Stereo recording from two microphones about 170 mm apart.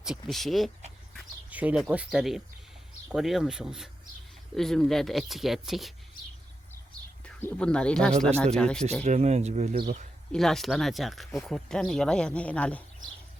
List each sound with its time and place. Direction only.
0.0 s speech: centre (ahead or behind)
7.3 s speech: 10° left (ahead or behind)
9.0 s speech: 40° right (ahead or behind)
9.7 s speech: 55° right (ahead or behind)
10.3 s speech: centre (ahead or behind)